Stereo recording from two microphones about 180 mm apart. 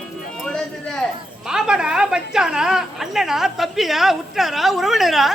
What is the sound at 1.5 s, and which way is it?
A woman's voice, 5° right (ahead or behind).